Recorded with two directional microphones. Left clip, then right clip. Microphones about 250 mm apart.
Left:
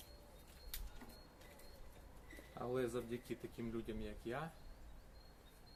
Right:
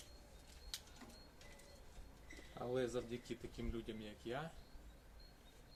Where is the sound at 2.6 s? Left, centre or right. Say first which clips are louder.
Even; centre.